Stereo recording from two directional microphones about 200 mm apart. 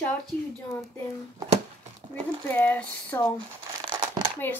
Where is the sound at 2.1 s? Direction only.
10° left (ahead or behind).